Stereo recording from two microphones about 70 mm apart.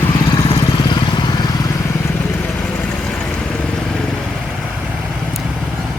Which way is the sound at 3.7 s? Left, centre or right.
Centre.